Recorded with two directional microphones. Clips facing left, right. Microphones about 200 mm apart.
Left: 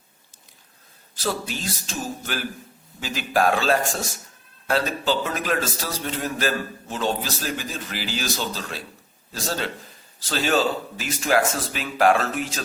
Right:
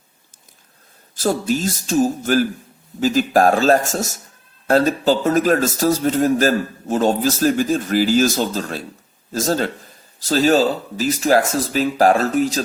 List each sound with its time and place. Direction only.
1.1 s a man's voice: 45° right (ahead or behind)